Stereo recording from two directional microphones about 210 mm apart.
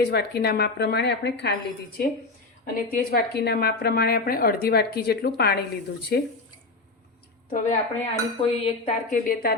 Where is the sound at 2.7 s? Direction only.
45° left (ahead or behind).